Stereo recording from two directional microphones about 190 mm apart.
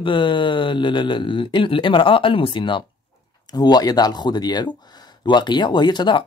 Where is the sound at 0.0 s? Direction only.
25° left (ahead or behind).